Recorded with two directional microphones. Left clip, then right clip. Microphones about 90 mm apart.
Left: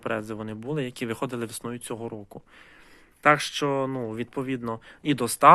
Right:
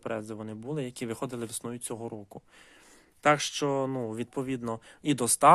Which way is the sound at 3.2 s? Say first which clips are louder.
Left 4 dB; 40° right (ahead or behind).